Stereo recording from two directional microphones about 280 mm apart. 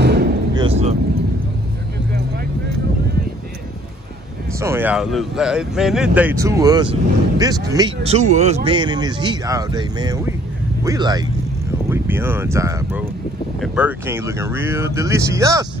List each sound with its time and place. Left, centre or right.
0.0 s a sound: right
0.6 s vehicle: right
4.6 s speech: centre